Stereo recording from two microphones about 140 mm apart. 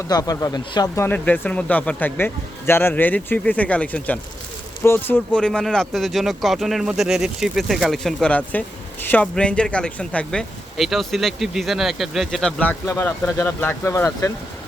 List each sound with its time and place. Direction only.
0.1 s speech: 25° left (ahead or behind)
1.0 s speech: 10° left (ahead or behind)
12.8 s speech: 15° left (ahead or behind)